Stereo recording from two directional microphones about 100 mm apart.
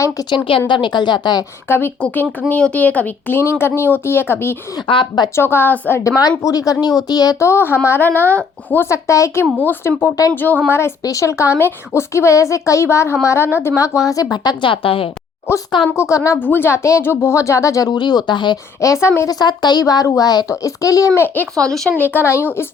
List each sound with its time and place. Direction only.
0.3 s a woman's voice: 55° left (ahead or behind)
1.6 s a woman's voice: 25° left (ahead or behind)
2.0 s a woman's voice: 10° left (ahead or behind)
4.9 s speech: 50° left (ahead or behind)
5.4 s a woman's voice: 25° left (ahead or behind)
6.1 s a woman's voice: 35° left (ahead or behind)
14.6 s a woman's voice: 65° left (ahead or behind)
16.0 s speech: 30° left (ahead or behind)
16.4 s a woman's voice: 20° left (ahead or behind)
17.9 s speech: 45° left (ahead or behind)
18.8 s a woman's voice: 30° left (ahead or behind)
19.3 s speech: 45° left (ahead or behind)
21.5 s speech: 5° left (ahead or behind)
22.1 s a woman's voice: 25° left (ahead or behind)